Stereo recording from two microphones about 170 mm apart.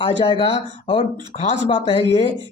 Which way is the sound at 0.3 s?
30° left (ahead or behind).